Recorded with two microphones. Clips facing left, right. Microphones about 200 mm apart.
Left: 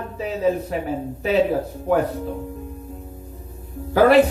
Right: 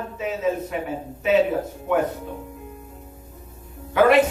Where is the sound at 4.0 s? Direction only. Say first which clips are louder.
Left 2 dB; 35° left (ahead or behind).